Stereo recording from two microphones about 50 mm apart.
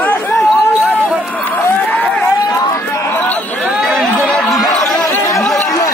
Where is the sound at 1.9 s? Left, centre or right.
Left.